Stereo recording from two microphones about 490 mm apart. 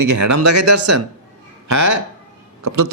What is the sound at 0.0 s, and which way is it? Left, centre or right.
A man's voice, right.